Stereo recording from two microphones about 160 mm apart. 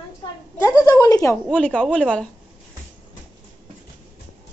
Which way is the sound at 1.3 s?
10° left (ahead or behind).